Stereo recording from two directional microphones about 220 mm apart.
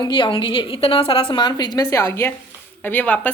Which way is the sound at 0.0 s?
20° left (ahead or behind).